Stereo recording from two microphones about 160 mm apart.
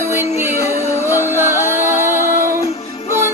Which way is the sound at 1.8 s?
15° right (ahead or behind).